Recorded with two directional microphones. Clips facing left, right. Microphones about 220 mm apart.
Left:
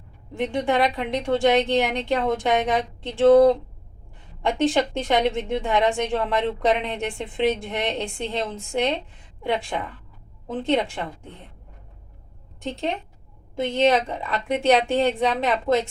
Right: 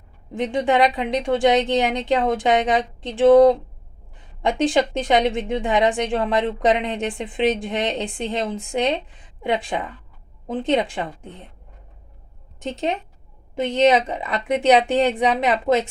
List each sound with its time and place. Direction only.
0.3 s a woman's voice: 15° right (ahead or behind)
4.4 s a woman's voice: 15° right (ahead or behind)
12.6 s a woman's voice: 20° right (ahead or behind)